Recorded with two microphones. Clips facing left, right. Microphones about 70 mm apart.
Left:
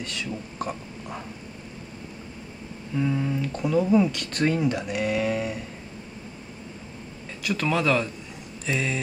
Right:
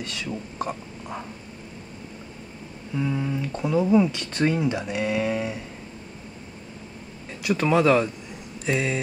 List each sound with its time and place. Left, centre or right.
0.6 s a sound: centre
3.0 s speech: centre
4.8 s speech: centre
7.4 s speech: centre